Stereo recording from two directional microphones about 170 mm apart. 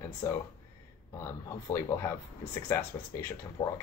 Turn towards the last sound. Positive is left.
turn(degrees=15)  # may be behind; listen again after turning